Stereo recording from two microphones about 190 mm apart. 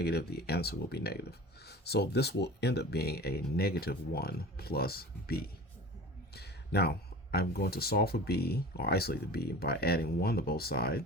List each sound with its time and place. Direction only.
0.0 s speech: 55° left (ahead or behind)